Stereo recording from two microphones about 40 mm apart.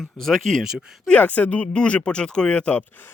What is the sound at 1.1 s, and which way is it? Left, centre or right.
Speech, left.